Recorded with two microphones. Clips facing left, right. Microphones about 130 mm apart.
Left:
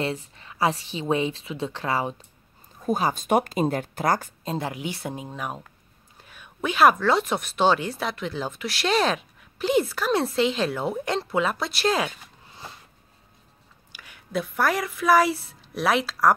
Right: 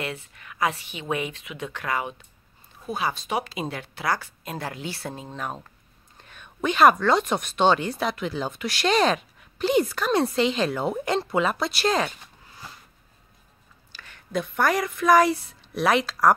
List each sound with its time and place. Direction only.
0.0 s a woman's voice: 30° left (ahead or behind)
4.5 s speech: 20° left (ahead or behind); by 12.1 s centre (ahead or behind)
13.9 s speech: 10° left (ahead or behind)